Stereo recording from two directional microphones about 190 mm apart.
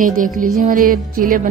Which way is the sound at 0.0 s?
45° right (ahead or behind).